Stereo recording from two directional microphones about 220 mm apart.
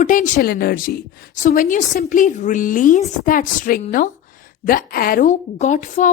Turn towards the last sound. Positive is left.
turn(degrees=35)  # may be behind; listen again after turning